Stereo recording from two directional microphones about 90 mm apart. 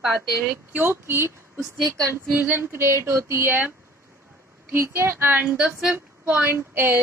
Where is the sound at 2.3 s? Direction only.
20° right (ahead or behind).